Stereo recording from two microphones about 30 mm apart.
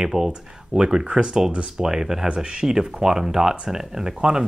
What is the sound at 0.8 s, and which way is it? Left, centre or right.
Speech, right.